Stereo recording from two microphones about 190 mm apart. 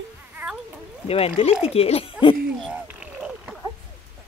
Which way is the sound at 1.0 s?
30° left (ahead or behind).